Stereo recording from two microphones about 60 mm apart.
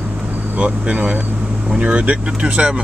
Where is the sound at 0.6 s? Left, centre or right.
Right.